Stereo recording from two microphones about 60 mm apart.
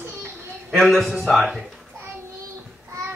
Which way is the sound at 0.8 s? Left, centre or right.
Centre.